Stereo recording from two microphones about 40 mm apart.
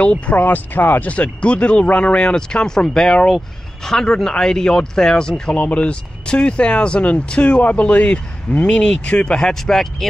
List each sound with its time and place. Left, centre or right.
0.0 s speech: left
0.4 s speech: left
1.1 s speech: left
5.6 s speech: left
8.6 s speech: left